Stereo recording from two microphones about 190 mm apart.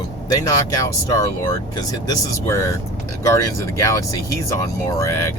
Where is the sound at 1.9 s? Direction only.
15° left (ahead or behind).